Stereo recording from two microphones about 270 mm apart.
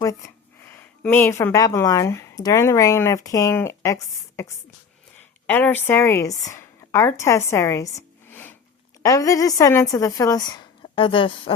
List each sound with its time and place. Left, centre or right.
0.6 s a woman's voice: centre